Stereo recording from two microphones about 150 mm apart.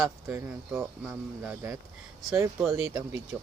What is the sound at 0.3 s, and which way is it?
Speech, 15° right (ahead or behind).